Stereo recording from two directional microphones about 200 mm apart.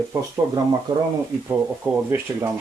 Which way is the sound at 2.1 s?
10° right (ahead or behind).